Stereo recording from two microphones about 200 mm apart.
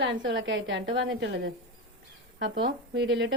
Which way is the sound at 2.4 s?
60° right (ahead or behind).